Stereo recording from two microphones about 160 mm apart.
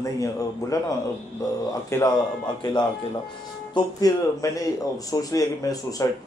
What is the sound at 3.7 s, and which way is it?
Speech, 20° left (ahead or behind).